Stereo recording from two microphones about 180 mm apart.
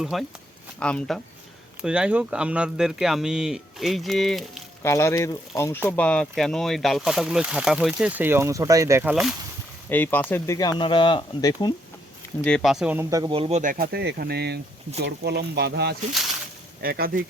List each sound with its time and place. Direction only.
0.0 s speech: centre (ahead or behind)
4.8 s speech: 15° left (ahead or behind); by 9.1 s 15° right (ahead or behind)
9.9 s speech: 10° left (ahead or behind)
12.4 s speech: 5° left (ahead or behind); by 13.6 s 30° right (ahead or behind)
13.6 s speech: 50° right (ahead or behind); by 16.0 s 65° right (ahead or behind)
16.8 s speech: 55° right (ahead or behind)